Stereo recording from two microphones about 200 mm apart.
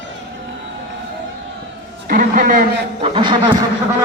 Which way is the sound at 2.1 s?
45° right (ahead or behind).